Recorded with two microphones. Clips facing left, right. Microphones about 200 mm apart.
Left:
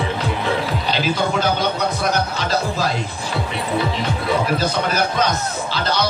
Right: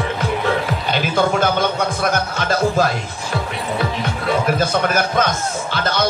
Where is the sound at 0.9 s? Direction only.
50° right (ahead or behind).